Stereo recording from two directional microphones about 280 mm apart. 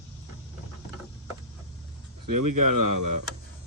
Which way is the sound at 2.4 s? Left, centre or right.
Right.